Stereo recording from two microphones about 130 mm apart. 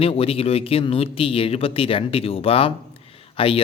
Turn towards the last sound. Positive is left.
turn(degrees=45)  # may be behind; listen again after turning